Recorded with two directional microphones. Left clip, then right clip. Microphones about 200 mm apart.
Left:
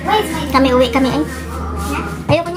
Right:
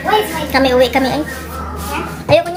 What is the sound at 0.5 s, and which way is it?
Speech, centre (ahead or behind).